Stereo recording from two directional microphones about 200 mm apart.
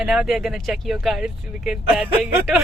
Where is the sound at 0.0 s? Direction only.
5° right (ahead or behind).